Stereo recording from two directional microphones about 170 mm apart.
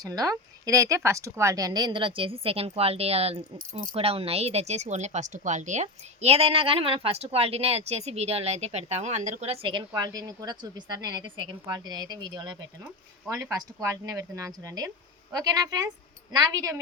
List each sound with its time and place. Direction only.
0.0 s speech: 20° right (ahead or behind)